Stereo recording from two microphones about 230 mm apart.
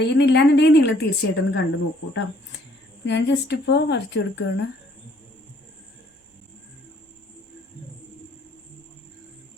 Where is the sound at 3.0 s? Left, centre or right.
Left.